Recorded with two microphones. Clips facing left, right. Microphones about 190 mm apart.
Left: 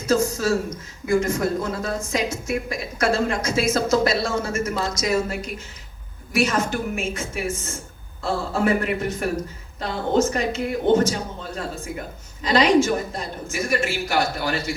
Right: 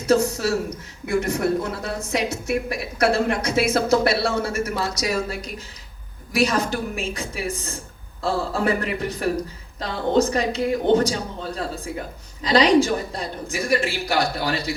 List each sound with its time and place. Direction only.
0.0 s a man's voice: 65° right (ahead or behind)
5.1 s a woman's voice: 35° right (ahead or behind)